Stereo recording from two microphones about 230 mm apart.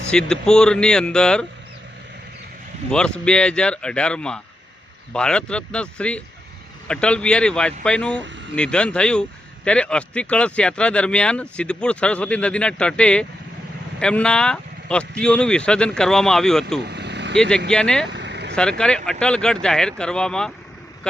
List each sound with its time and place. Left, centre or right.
0.1 s speech: centre
2.9 s speech: centre
16.8 s vehicle: right
17.3 s speech: centre
18.1 s vehicle: right
18.5 s speech: centre